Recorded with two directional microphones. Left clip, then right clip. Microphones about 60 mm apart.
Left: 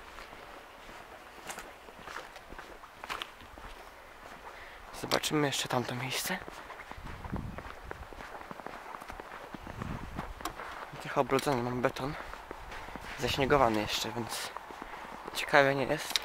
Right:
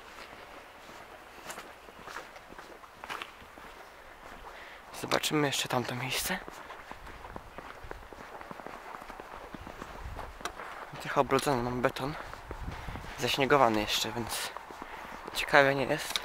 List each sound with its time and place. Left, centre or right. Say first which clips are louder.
3.0 s walk: left 1 dB; centre
5.2 s speech: right 1 dB; right
11.0 s speech: right 2 dB; right